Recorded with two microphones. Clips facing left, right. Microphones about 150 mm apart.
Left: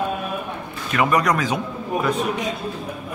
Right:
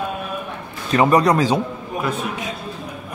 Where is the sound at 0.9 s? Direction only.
30° right (ahead or behind).